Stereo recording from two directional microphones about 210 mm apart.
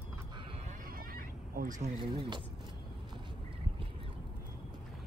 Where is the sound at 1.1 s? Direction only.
45° right (ahead or behind); by 2.4 s 30° right (ahead or behind).